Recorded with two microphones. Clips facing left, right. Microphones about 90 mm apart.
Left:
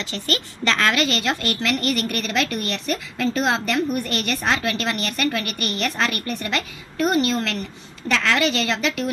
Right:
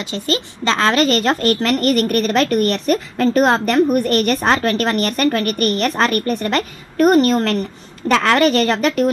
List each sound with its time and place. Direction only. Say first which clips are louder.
0.0 s a woman's voice: right 5 dB; 20° right (ahead or behind); by 9.1 s 45° right (ahead or behind)